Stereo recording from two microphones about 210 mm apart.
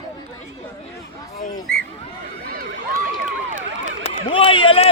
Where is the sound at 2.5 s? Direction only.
45° right (ahead or behind).